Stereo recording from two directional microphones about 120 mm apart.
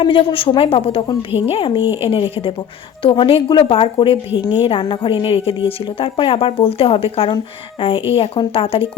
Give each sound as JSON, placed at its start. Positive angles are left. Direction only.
{"t": 0.0, "sound": "a woman's voice", "side_deg": 45}